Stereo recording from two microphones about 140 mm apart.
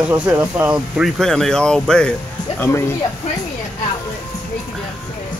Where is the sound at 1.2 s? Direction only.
5° left (ahead or behind).